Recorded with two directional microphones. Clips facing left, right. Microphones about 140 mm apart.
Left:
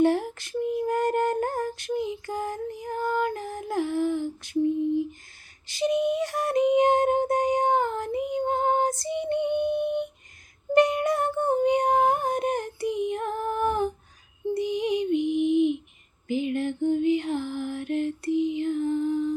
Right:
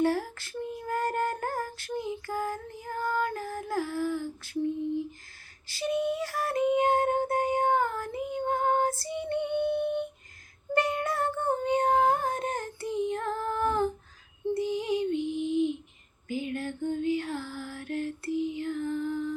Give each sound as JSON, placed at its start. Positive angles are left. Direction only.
{"t": 0.0, "sound": "female singing", "side_deg": 20}
{"t": 5.6, "sound": "a sound", "side_deg": 20}
{"t": 14.5, "sound": "female singing", "side_deg": 15}
{"t": 16.3, "sound": "music", "side_deg": 20}